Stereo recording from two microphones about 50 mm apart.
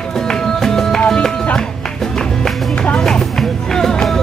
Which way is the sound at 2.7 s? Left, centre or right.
Left.